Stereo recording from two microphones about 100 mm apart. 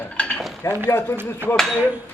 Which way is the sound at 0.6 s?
30° left (ahead or behind).